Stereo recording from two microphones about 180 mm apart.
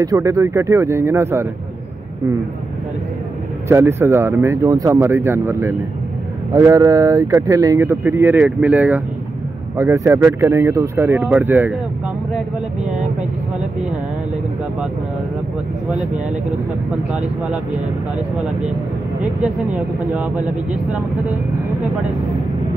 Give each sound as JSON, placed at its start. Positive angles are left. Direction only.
{"t": 0.0, "sound": "speech", "side_deg": -20}
{"t": 3.6, "sound": "speech", "side_deg": -15}
{"t": 17.1, "sound": "speech", "side_deg": -10}
{"t": 19.4, "sound": "speech", "side_deg": -5}